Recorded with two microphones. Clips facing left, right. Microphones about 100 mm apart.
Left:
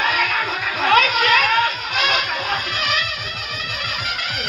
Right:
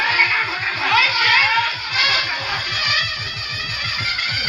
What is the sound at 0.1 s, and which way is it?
Music, 35° left (ahead or behind).